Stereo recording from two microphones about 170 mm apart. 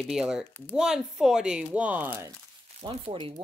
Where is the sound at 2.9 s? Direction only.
35° right (ahead or behind).